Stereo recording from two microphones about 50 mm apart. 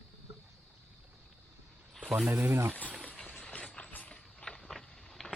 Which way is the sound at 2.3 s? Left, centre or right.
Right.